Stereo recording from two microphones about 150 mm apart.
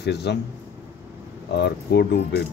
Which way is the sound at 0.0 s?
90° left.